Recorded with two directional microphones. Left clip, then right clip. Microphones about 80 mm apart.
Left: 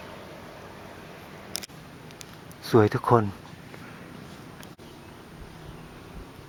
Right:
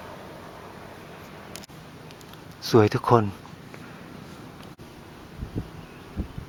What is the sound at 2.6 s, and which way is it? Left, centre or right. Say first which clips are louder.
Speech: right 1 dB; centre.